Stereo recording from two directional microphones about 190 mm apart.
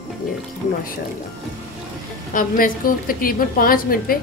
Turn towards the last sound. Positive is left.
turn(degrees=50)  # may be behind; listen again after turning